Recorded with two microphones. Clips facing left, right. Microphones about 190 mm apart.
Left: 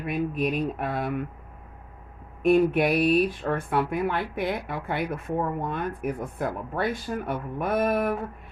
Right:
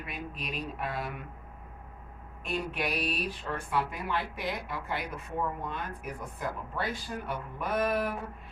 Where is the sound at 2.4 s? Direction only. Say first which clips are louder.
Left 13 dB; 55° left (ahead or behind).